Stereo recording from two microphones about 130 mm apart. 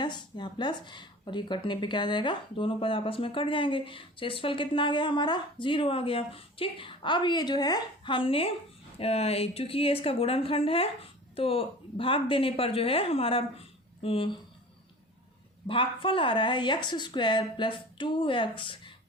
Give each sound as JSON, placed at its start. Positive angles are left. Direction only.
{"t": 0.0, "sound": "speech", "side_deg": 35}
{"t": 15.6, "sound": "speech", "side_deg": 40}